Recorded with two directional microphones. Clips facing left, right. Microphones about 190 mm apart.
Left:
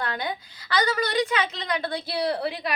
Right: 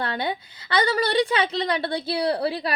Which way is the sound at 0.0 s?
30° right (ahead or behind).